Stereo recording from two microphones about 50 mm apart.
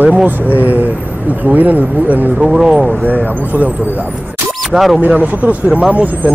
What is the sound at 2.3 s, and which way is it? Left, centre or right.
Speech, centre.